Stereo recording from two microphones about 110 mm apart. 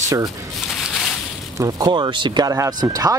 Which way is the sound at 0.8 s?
Centre (ahead or behind).